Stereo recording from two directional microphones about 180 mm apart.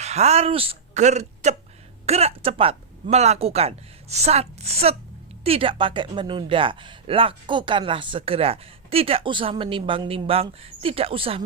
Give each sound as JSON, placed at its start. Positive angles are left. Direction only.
{"t": 0.0, "sound": "a woman's voice", "side_deg": -35}